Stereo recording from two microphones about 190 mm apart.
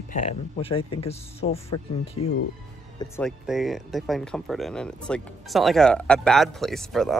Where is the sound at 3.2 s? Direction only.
Centre (ahead or behind).